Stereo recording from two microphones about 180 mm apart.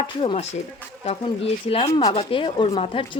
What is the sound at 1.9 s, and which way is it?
Speech, 20° left (ahead or behind).